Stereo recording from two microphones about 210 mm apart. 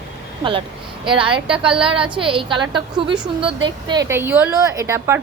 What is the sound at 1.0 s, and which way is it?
A woman's voice, 25° right (ahead or behind).